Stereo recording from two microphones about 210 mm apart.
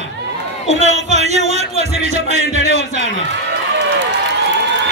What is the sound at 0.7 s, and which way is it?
Music, 30° right (ahead or behind).